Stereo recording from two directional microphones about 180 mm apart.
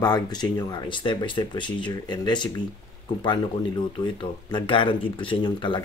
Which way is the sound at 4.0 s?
25° left (ahead or behind).